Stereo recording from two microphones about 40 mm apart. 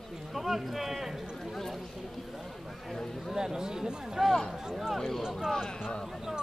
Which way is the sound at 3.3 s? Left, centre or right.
Centre.